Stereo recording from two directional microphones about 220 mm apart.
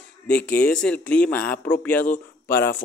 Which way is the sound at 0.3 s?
5° left (ahead or behind).